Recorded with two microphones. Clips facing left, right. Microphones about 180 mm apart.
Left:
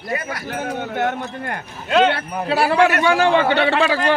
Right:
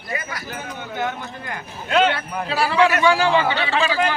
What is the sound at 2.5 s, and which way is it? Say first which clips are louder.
A man's voice: left 2 dB; 50° left (ahead or behind).